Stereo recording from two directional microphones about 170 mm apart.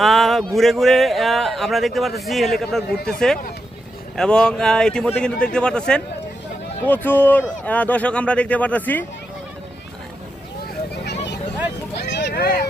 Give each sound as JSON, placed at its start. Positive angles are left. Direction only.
{"t": 0.0, "sound": "a man's voice", "side_deg": 0}
{"t": 11.0, "sound": "a sound", "side_deg": 75}
{"t": 11.9, "sound": "vehicle", "side_deg": 80}